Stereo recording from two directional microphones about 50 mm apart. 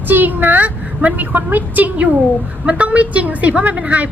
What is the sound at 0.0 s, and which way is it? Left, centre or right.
A woman's voice, right.